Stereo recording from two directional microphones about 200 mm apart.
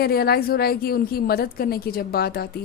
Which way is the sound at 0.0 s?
50° left (ahead or behind).